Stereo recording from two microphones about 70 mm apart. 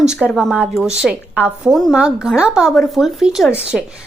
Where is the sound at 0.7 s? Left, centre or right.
Centre.